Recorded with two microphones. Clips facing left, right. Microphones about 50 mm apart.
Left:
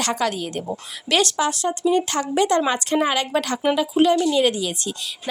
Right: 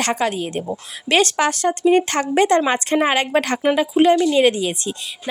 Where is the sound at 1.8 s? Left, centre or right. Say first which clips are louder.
Right 4 dB; right.